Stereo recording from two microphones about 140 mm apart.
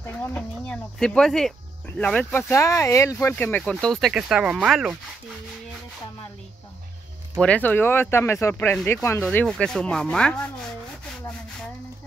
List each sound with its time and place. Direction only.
0.0 s a sound: 15° left (ahead or behind)
1.9 s speech: 10° left (ahead or behind)
7.3 s speech: 10° left (ahead or behind)